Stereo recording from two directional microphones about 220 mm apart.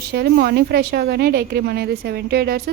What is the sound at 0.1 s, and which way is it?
A woman's voice, 45° right (ahead or behind).